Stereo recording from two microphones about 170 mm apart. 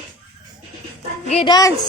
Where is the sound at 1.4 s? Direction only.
25° left (ahead or behind).